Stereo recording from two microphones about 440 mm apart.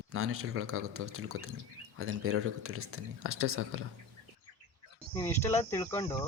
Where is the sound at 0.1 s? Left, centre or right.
Right.